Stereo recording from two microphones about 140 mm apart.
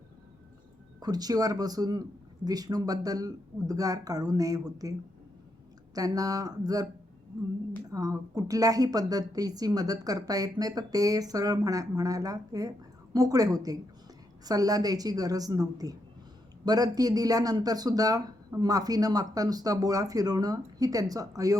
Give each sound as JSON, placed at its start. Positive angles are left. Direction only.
{"t": 0.9, "sound": "a woman's voice", "side_deg": -30}
{"t": 7.9, "sound": "a woman's voice", "side_deg": -25}